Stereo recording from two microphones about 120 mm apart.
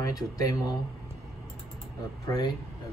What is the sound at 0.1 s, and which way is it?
Speech, 30° left (ahead or behind).